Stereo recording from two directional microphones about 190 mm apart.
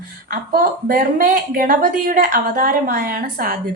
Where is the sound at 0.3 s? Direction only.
45° right (ahead or behind).